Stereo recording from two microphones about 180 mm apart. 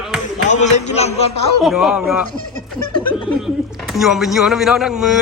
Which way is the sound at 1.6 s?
Centre (ahead or behind).